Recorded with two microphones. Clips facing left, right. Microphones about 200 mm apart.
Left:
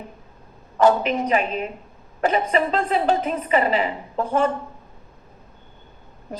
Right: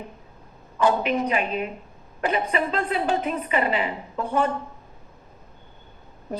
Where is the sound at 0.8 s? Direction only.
40° left (ahead or behind).